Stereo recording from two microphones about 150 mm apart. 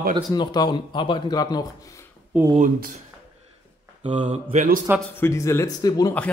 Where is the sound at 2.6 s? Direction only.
65° right (ahead or behind).